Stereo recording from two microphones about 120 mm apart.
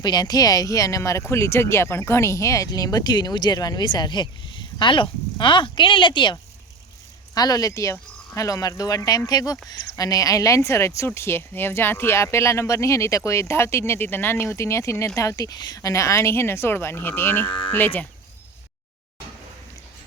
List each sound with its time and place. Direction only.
0.0 s speech: 35° left (ahead or behind)
7.3 s speech: 30° left (ahead or behind); by 18.0 s 15° left (ahead or behind)